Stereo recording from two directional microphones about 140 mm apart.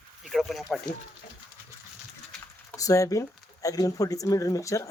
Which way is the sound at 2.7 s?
25° left (ahead or behind).